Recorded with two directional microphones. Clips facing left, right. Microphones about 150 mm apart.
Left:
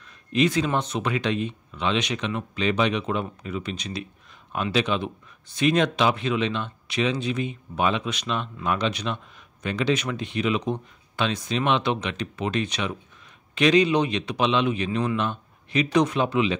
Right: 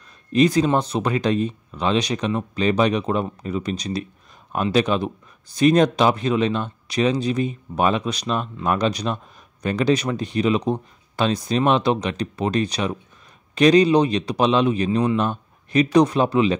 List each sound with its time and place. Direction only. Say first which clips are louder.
0.3 s speech: right 5 dB; 40° right (ahead or behind)